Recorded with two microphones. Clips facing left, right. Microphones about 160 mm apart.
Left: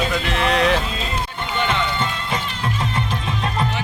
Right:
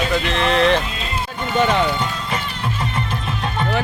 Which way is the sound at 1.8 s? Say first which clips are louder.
Right 2 dB; 5° right (ahead or behind).